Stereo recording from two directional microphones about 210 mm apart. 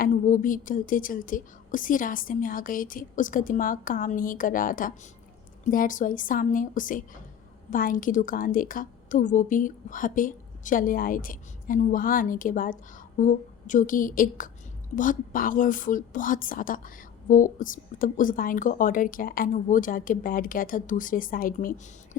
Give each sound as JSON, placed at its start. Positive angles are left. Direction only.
{"t": 0.0, "sound": "a woman's voice", "side_deg": 40}